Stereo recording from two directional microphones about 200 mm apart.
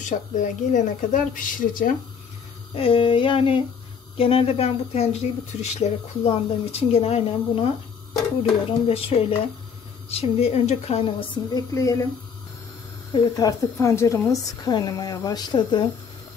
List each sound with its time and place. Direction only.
0.0 s speech: 40° left (ahead or behind)
2.7 s a woman's voice: 30° left (ahead or behind)
11.5 s speech: 15° left (ahead or behind)
13.1 s a woman's voice: 20° left (ahead or behind)